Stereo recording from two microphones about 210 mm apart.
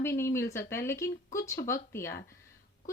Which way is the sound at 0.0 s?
15° left (ahead or behind).